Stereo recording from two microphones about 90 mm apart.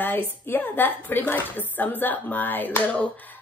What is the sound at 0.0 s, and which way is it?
A woman's voice, 20° left (ahead or behind).